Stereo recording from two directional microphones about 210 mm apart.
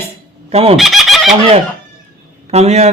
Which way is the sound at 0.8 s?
Centre (ahead or behind).